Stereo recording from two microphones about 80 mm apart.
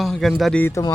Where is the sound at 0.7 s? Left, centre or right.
Left.